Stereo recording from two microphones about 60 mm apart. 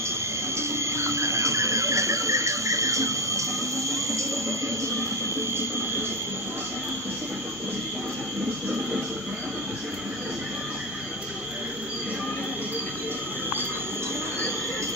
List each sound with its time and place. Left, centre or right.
0.6 s cricket: right